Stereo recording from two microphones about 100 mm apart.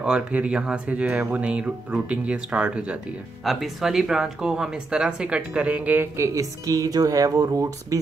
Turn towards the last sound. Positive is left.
turn(degrees=-35)  # may be behind; listen again after turning